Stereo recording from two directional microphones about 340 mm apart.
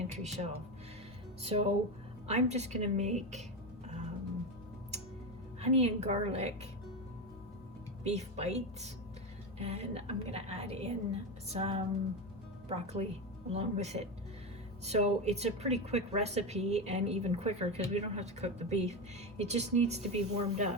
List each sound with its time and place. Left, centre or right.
0.1 s a woman's voice: centre
5.5 s a woman's voice: centre
8.0 s speech: centre